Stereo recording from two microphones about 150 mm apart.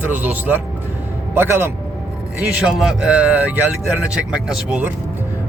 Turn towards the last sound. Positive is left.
turn(degrees=-10)  # may be behind; listen again after turning